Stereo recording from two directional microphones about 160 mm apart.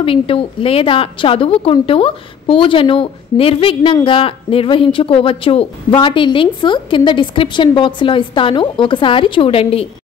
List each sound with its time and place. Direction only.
0.0 s a woman's voice: 35° left (ahead or behind)